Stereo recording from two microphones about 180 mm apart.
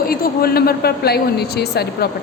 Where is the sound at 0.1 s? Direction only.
55° left (ahead or behind).